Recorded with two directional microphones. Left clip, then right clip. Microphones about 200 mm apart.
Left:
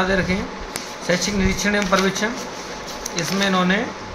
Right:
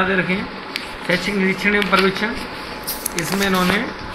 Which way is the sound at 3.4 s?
35° left (ahead or behind).